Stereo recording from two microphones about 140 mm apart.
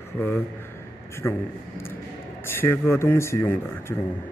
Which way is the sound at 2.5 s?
15° left (ahead or behind).